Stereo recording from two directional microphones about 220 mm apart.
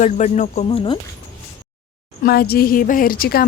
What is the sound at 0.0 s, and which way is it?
Speech, 35° left (ahead or behind).